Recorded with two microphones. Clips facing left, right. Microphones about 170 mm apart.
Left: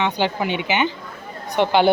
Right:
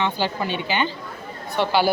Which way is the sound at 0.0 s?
15° left (ahead or behind).